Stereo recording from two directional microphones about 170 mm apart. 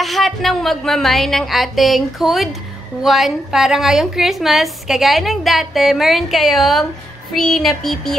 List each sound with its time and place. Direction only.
0.0 s a woman's voice: centre (ahead or behind)